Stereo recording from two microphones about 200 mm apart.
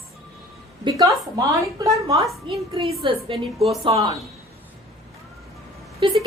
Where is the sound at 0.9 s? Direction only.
20° right (ahead or behind).